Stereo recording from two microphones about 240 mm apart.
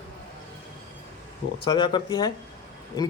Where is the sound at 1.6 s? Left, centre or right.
Centre.